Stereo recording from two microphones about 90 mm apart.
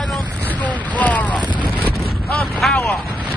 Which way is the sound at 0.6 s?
15° left (ahead or behind).